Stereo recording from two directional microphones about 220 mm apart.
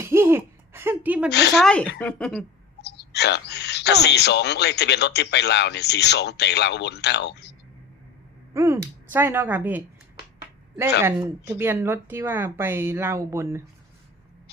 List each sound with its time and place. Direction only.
0.0 s a sound: 10° right (ahead or behind)
1.3 s speech: 50° left (ahead or behind)
1.5 s speech: 5° left (ahead or behind)
2.8 s speech: 50° left (ahead or behind)
8.5 s speech: 15° right (ahead or behind)
11.0 s speech: 15° right (ahead or behind)